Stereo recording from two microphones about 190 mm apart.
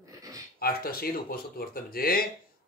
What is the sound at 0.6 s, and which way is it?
Speech, 55° left (ahead or behind).